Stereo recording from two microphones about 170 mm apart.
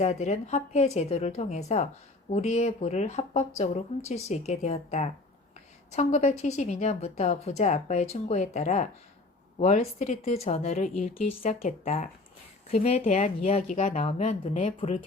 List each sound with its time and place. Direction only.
0.0 s a woman's voice: 40° left (ahead or behind)